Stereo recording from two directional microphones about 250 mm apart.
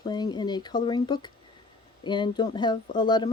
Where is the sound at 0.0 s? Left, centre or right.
Centre.